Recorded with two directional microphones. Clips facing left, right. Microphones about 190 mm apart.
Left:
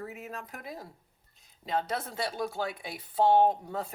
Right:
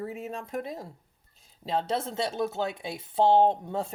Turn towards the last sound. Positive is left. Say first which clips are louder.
# right 2 dB
turn(degrees=-25)  # may be behind; listen again after turning